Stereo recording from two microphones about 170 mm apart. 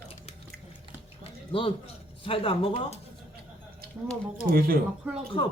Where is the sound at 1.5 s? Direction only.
30° left (ahead or behind).